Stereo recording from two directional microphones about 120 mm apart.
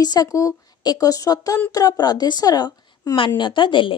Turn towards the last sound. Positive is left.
turn(degrees=45)  # may be behind; listen again after turning